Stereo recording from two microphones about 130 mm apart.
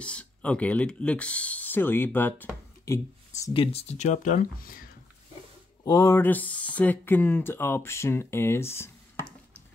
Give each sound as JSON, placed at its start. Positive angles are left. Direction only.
{"t": 0.0, "sound": "speech", "side_deg": 10}
{"t": 3.5, "sound": "speech", "side_deg": 40}
{"t": 3.8, "sound": "speech", "side_deg": 60}
{"t": 5.9, "sound": "speech", "side_deg": 25}